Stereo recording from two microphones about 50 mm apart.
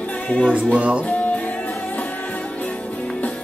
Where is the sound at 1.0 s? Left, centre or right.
Left.